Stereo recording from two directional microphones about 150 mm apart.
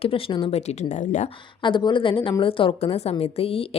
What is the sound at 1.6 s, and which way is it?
A woman's voice, 30° left (ahead or behind).